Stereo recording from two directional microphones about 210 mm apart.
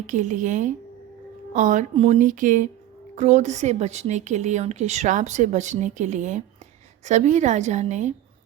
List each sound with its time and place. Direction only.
0.1 s a woman's voice: 35° right (ahead or behind)